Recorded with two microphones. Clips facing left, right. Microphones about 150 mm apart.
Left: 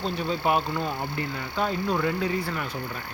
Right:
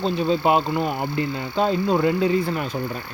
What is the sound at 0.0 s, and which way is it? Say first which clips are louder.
Speech: right 6 dB; 20° right (ahead or behind).